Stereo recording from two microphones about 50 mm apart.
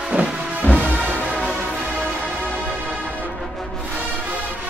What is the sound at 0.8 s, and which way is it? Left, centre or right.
Music, left.